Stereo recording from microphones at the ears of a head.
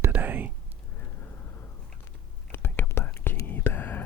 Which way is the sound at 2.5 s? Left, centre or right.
Left.